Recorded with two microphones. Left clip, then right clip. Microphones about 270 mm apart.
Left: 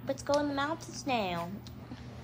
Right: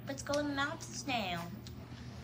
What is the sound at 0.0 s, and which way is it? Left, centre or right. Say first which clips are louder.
A woman's voice: left 6 dB; centre.